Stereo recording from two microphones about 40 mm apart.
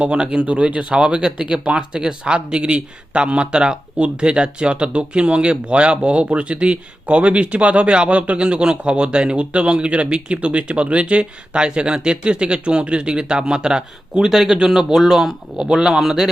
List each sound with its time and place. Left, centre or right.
0.0 s a man's voice: right; by 16.3 s centre